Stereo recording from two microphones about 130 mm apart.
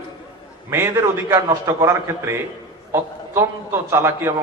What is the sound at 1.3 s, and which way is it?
A man's voice, 20° right (ahead or behind).